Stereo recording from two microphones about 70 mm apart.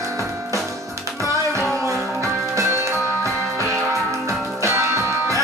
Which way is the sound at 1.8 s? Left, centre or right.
Right.